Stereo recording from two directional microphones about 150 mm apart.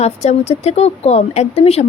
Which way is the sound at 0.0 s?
45° left (ahead or behind).